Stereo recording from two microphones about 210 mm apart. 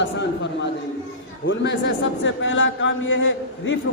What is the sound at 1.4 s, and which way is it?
A man's voice, 60° left (ahead or behind).